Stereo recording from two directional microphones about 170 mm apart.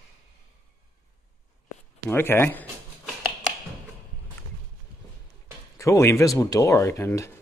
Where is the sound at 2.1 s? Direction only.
15° left (ahead or behind).